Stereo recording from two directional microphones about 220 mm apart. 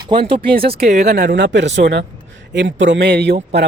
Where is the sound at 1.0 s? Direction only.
50° right (ahead or behind).